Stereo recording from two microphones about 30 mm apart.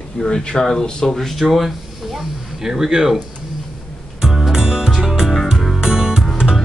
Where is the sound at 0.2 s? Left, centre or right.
Left.